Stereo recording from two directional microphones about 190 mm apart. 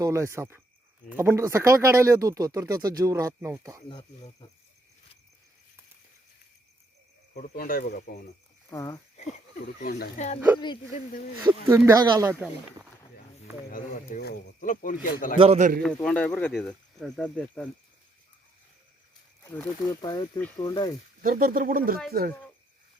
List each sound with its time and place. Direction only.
0.0 s speech: 15° right (ahead or behind)
7.5 s speech: 50° left (ahead or behind)
8.7 s speech: 15° left (ahead or behind)
9.2 s speech: 35° left (ahead or behind)
9.7 s speech: 50° left (ahead or behind)
10.2 s speech: 35° left (ahead or behind)
11.9 s speech: 20° right (ahead or behind)
13.7 s speech: 45° left (ahead or behind)
15.4 s a man's voice: 35° right (ahead or behind)
15.8 s speech: 5° left (ahead or behind)
19.5 s speech: 15° left (ahead or behind)
21.2 s speech: 50° right (ahead or behind)